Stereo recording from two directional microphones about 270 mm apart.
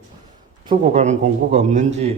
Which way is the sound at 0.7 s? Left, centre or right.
Right.